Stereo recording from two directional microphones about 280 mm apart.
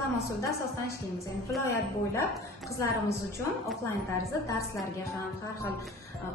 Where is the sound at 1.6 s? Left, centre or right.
Centre.